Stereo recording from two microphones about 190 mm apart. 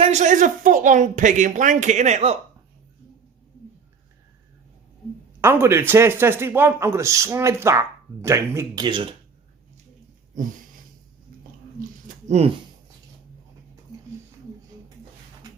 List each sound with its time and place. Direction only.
0.0 s speech: 35° right (ahead or behind)
5.4 s speech: 15° right (ahead or behind)
12.0 s a sound: 35° right (ahead or behind)